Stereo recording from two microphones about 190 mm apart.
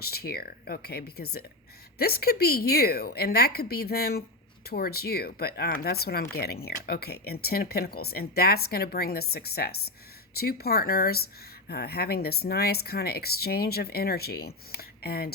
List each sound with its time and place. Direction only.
0.0 s speech: 55° left (ahead or behind)